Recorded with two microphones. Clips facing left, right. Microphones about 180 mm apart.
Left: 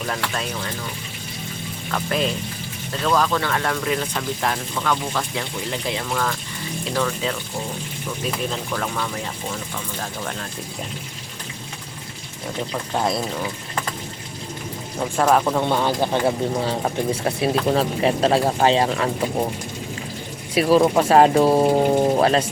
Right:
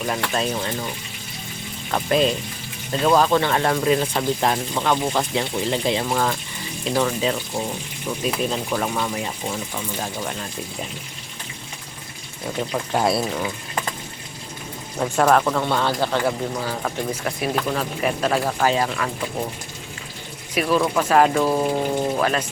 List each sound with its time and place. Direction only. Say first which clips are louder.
1.9 s speech: right 4 dB; 20° right (ahead or behind)
8.4 s speech: right 2 dB; 20° right (ahead or behind)
12.9 s speech: right 2 dB; 5° right (ahead or behind)
14.9 s speech: right 1 dB; centre (ahead or behind)
15.4 s speech: left 1 dB; 15° left (ahead or behind); by 19.1 s 30° left (ahead or behind)
20.6 s speech: left 4 dB; 35° left (ahead or behind)